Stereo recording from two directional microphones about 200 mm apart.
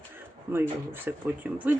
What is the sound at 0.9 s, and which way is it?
Speech, 10° right (ahead or behind).